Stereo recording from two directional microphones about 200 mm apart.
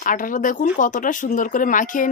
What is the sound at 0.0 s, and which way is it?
Speech, 40° left (ahead or behind).